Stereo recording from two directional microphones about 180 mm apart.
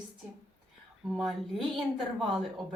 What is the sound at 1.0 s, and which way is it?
A woman's voice, centre (ahead or behind).